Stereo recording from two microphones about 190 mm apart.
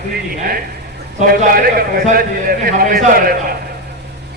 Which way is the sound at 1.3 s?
50° right (ahead or behind).